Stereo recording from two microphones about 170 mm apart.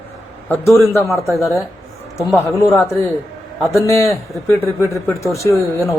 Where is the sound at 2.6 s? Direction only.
15° left (ahead or behind).